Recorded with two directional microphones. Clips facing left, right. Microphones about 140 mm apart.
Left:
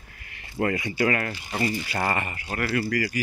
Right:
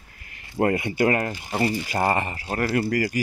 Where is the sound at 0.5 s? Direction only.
50° right (ahead or behind).